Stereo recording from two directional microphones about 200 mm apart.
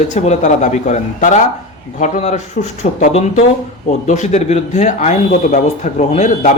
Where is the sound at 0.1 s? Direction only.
35° left (ahead or behind).